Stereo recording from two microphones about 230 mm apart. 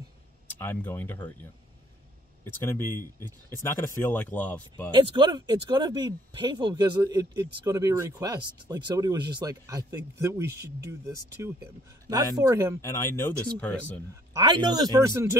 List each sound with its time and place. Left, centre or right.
0.5 s speech: centre
3.2 s speech: centre
3.5 s speech: centre
4.9 s speech: centre
12.1 s speech: centre
12.8 s speech: centre
14.3 s speech: centre